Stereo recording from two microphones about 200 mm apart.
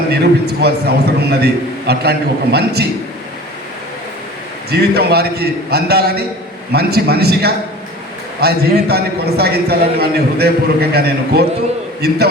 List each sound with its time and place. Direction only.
0.6 s a man's voice: 55° right (ahead or behind)
4.7 s a man's voice: 55° right (ahead or behind)